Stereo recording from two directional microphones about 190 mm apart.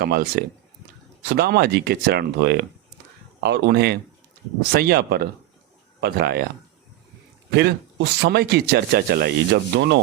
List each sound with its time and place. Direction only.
0.0 s speech: 55° right (ahead or behind)
7.5 s speech: 60° right (ahead or behind)